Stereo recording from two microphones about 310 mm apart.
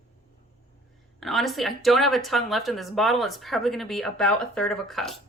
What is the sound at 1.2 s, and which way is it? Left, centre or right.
A woman's voice, centre.